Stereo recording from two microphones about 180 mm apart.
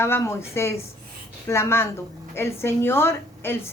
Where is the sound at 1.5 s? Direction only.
15° left (ahead or behind).